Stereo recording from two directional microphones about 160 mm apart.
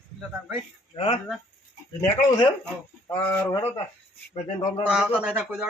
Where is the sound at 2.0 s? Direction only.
20° left (ahead or behind).